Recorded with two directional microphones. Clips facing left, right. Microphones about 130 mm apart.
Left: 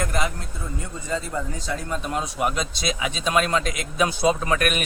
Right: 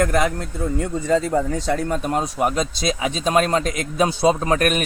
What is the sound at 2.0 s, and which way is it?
A man's voice, 40° right (ahead or behind).